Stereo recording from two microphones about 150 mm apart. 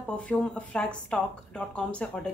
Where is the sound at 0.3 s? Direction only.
5° left (ahead or behind).